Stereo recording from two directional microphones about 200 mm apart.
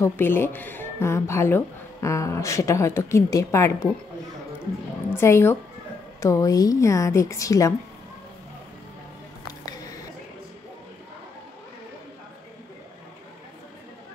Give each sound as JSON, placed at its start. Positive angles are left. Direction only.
{"t": 0.0, "sound": "speech", "side_deg": 10}
{"t": 5.1, "sound": "speech", "side_deg": 15}